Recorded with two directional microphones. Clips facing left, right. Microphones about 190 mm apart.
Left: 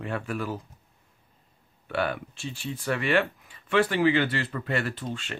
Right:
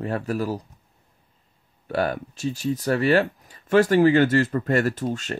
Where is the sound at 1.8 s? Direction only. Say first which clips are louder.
Right 4 dB; 40° right (ahead or behind).